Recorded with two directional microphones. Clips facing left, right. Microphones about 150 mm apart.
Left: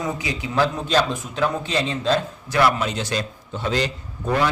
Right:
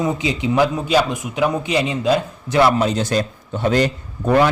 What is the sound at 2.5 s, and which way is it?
Speech, 25° right (ahead or behind).